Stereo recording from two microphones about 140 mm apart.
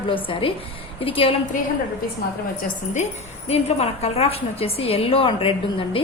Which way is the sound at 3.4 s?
45° left (ahead or behind).